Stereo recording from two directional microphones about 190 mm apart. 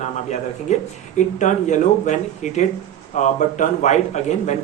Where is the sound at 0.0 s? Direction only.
40° left (ahead or behind).